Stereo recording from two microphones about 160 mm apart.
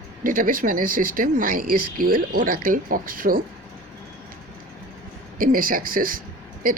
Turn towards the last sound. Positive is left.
turn(degrees=-60)  # may be behind; listen again after turning